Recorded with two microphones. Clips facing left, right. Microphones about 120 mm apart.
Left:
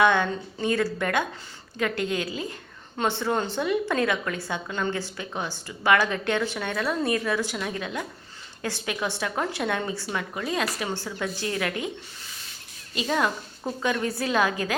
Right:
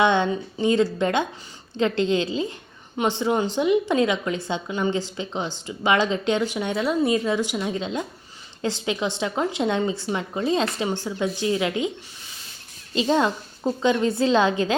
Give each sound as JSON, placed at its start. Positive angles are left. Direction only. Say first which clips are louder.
{"t": 0.0, "sound": "a woman's voice", "louder": "right 2 dB", "side_deg": -20}
{"t": 12.9, "sound": "a woman's voice", "louder": "right 5 dB", "side_deg": -25}